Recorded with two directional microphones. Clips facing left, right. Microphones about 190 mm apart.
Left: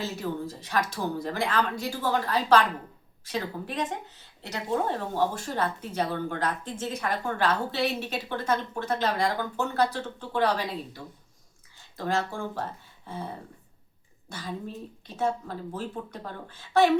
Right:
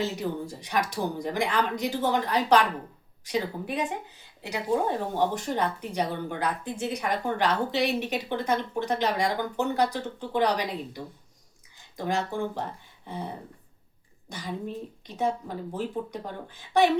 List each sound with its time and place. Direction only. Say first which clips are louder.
0.0 s a woman's voice: right 2 dB; 15° right (ahead or behind)